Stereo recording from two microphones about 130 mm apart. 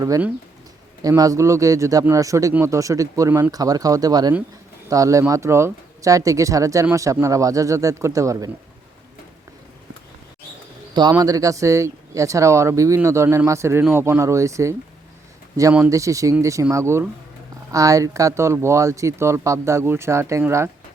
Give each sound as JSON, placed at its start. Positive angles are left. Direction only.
{"t": 1.0, "sound": "speech", "side_deg": -25}
{"t": 11.2, "sound": "speech", "side_deg": -25}
{"t": 15.9, "sound": "speech", "side_deg": -25}